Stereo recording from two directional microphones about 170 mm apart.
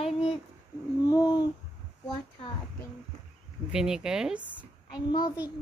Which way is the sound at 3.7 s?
5° right (ahead or behind).